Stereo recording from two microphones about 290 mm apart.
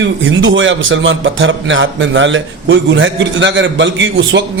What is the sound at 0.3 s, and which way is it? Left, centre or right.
A man's voice, right.